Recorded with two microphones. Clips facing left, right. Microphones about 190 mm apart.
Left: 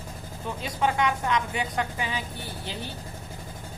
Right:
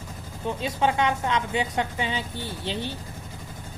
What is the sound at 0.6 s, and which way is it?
A woman's voice, 25° right (ahead or behind).